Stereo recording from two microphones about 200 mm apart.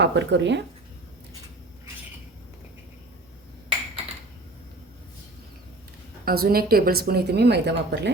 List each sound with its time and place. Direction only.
0.0 s speech: 60° right (ahead or behind)
6.2 s speech: 50° right (ahead or behind)